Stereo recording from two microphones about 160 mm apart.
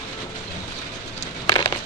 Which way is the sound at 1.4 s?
20° left (ahead or behind).